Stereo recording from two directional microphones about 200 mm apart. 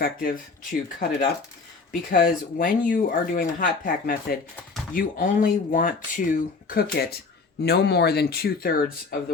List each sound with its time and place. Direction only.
0.0 s speech: 45° left (ahead or behind)
7.6 s speech: 55° left (ahead or behind)